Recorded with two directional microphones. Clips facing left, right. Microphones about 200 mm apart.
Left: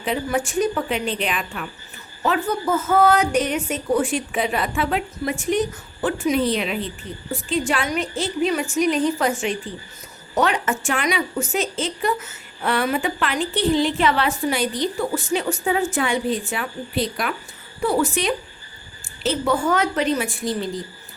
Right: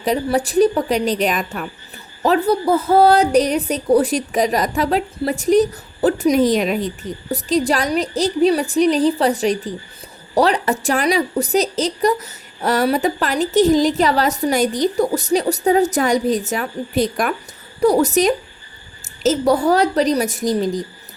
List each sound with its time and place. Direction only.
0.0 s a woman's voice: 40° right (ahead or behind)